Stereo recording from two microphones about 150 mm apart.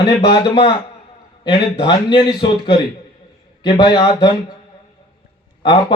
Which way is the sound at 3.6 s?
30° left (ahead or behind).